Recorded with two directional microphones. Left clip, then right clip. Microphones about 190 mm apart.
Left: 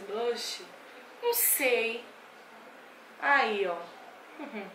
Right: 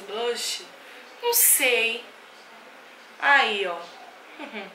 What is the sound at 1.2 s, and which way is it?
Speech, 5° left (ahead or behind).